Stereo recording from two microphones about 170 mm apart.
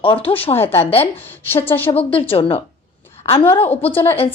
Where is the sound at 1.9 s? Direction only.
30° left (ahead or behind).